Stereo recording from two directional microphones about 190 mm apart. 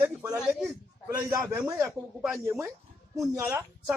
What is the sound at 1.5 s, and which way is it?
Speech, 15° right (ahead or behind).